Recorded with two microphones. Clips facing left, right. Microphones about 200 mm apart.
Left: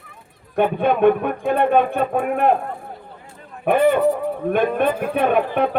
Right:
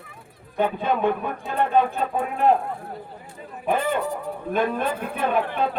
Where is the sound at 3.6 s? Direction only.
65° left (ahead or behind).